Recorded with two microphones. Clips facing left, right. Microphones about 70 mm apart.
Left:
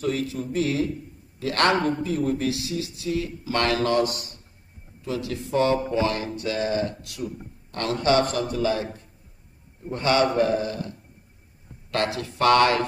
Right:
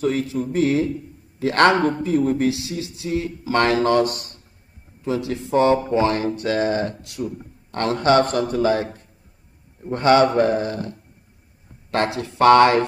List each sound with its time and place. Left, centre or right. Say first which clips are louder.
0.0 s speech: right 5 dB; right
5.0 s speech: right 5 dB; right
9.8 s speech: right 6 dB; right
11.9 s speech: right 4 dB; right